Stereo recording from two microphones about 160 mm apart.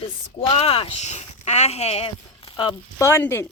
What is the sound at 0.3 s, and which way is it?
Speech, 40° left (ahead or behind).